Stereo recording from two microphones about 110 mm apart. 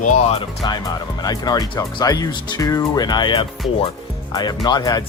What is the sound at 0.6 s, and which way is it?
Speech, 45° left (ahead or behind).